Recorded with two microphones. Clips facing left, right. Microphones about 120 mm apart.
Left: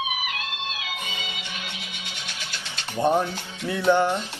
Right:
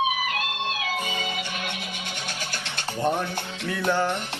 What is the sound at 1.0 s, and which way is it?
Music, 45° right (ahead or behind).